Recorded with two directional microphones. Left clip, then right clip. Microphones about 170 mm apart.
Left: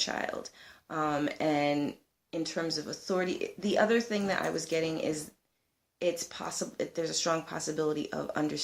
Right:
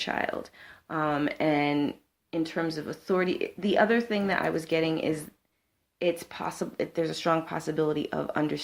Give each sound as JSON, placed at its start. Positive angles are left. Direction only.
{"t": 0.0, "sound": "speech", "side_deg": -45}